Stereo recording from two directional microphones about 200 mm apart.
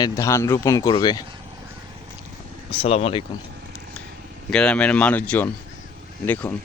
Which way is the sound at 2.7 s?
30° left (ahead or behind).